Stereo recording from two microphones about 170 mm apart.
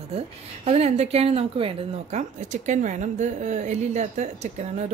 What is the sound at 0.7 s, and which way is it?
A woman's voice, 40° right (ahead or behind).